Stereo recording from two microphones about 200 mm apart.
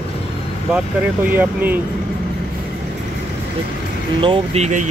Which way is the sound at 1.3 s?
10° right (ahead or behind).